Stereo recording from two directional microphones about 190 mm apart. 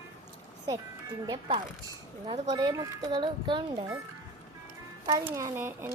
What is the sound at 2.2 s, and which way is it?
Speech, 35° right (ahead or behind).